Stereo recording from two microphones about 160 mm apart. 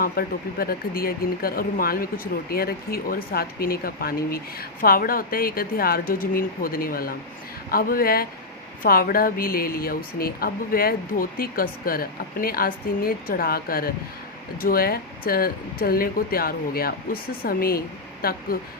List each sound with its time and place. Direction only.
0.0 s speech: 70° left (ahead or behind)